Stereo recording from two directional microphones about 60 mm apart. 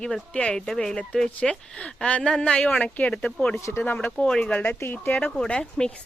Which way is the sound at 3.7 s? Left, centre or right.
Left.